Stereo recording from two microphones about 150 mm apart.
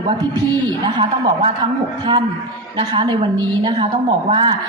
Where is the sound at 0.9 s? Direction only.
30° right (ahead or behind).